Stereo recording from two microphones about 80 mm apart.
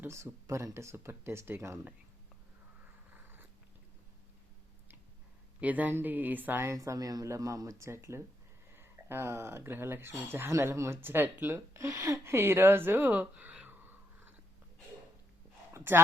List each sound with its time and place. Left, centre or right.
0.4 s speech: right
3.1 s cat: right
5.5 s speech: centre
6.7 s speech: right; by 13.9 s centre
15.7 s a sound: right